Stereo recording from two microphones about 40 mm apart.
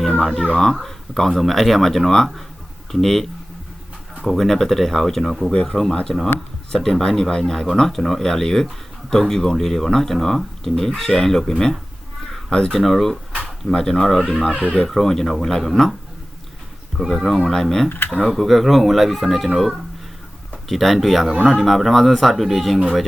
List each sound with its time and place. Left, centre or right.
0.6 s speech: centre
4.3 s speech: centre; by 12.7 s left
12.7 s speech: centre
17.0 s speech: centre
17.8 s speech: left
18.3 s speech: centre
20.7 s speech: centre